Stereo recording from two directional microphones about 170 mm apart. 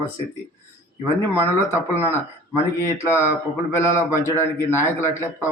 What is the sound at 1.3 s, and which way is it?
A man's voice, 15° left (ahead or behind).